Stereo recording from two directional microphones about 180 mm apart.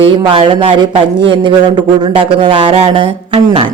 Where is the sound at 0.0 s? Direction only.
30° right (ahead or behind).